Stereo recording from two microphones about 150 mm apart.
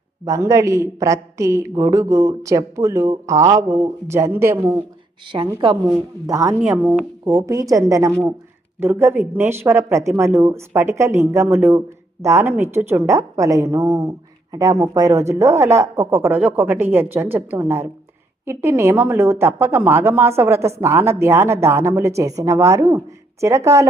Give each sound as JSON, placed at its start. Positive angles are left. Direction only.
{"t": 0.3, "sound": "a woman's voice", "side_deg": -20}
{"t": 6.6, "sound": "a woman's voice", "side_deg": -10}